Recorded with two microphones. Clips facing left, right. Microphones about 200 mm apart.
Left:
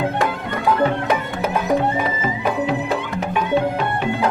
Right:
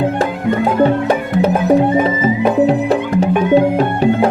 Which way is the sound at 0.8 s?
30° right (ahead or behind).